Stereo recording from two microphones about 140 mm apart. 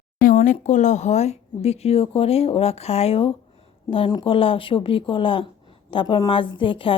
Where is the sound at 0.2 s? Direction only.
70° left (ahead or behind).